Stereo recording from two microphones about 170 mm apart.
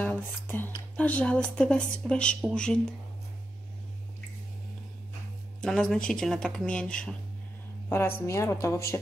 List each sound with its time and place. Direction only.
0.0 s speech: 10° left (ahead or behind)
5.6 s a woman's voice: 5° left (ahead or behind)